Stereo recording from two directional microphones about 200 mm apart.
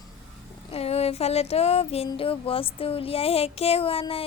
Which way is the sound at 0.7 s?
30° left (ahead or behind).